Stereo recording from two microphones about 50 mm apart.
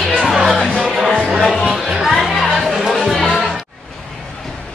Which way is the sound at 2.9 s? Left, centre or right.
Centre.